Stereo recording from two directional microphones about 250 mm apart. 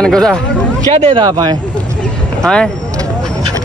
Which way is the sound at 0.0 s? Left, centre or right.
Centre.